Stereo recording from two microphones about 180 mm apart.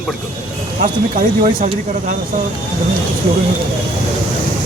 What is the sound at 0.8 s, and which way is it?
Speech, 45° right (ahead or behind).